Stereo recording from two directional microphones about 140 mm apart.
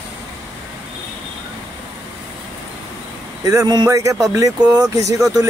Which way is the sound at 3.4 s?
25° right (ahead or behind).